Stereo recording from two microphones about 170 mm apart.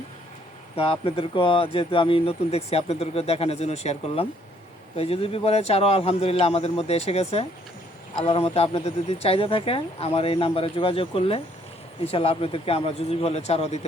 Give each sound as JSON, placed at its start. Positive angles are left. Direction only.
{"t": 0.8, "sound": "speech", "side_deg": 35}